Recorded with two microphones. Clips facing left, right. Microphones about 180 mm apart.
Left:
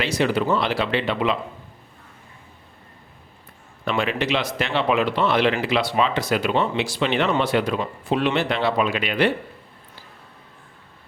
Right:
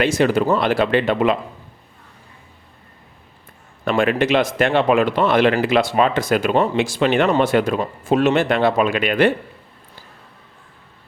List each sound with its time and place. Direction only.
0.0 s speech: 50° right (ahead or behind)
3.8 s speech: 50° right (ahead or behind)